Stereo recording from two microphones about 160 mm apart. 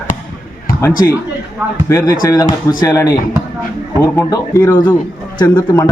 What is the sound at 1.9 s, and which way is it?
Speech, 20° left (ahead or behind).